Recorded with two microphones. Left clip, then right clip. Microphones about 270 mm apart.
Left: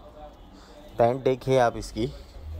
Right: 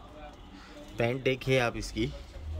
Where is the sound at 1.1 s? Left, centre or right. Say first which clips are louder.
Left 1 dB; centre.